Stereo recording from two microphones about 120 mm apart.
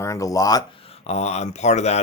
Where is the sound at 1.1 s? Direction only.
65° left (ahead or behind).